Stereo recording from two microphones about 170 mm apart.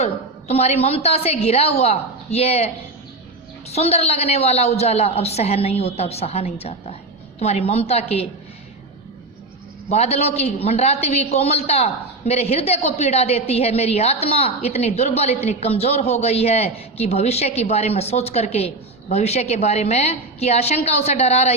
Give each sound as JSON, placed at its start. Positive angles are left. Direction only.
{"t": 0.0, "sound": "a man's voice", "side_deg": 40}
{"t": 3.7, "sound": "a man's voice", "side_deg": 40}
{"t": 9.9, "sound": "a man's voice", "side_deg": 40}